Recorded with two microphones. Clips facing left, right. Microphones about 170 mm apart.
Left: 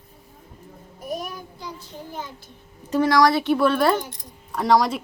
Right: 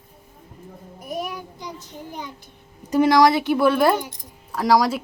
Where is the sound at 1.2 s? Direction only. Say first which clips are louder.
Right 3 dB; 15° right (ahead or behind).